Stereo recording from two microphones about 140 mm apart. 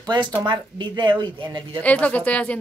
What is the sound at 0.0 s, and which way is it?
Speech, 35° right (ahead or behind).